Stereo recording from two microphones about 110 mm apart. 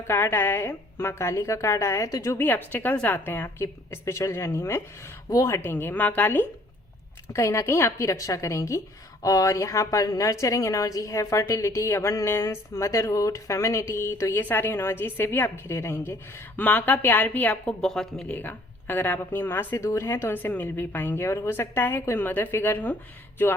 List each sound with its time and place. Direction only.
0.1 s a woman's voice: 20° left (ahead or behind)
7.3 s a woman's voice: 25° left (ahead or behind); by 18.3 s 5° left (ahead or behind)
18.3 s a woman's voice: 15° left (ahead or behind)